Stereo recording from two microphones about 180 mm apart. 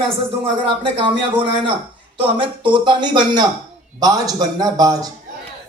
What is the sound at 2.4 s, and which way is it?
Speech, 25° right (ahead or behind).